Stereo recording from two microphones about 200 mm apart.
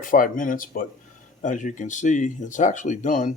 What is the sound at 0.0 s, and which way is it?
Speech, 40° left (ahead or behind).